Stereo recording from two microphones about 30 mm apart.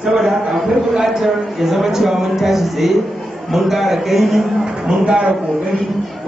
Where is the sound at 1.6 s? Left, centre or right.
Centre.